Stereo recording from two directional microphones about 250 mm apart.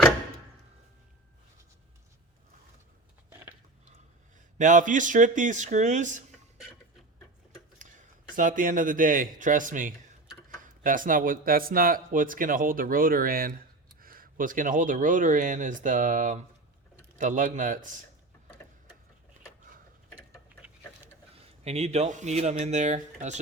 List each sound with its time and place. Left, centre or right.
4.5 s speech: right
8.4 s speech: right
21.3 s speech: right